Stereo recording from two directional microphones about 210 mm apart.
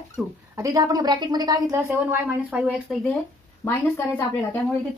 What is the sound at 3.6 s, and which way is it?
Speech, 10° left (ahead or behind).